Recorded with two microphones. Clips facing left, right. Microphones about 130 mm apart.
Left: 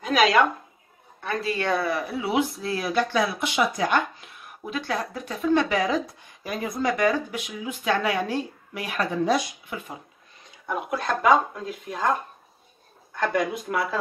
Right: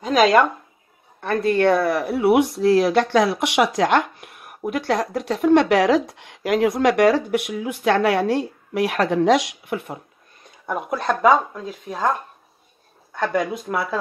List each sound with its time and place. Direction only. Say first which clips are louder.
0.0 s speech: right 4 dB; 40° right (ahead or behind)
1.2 s speech: right 9 dB; 55° right (ahead or behind)
10.7 s speech: right 4 dB; centre (ahead or behind)
13.4 s speech: right 2 dB; centre (ahead or behind)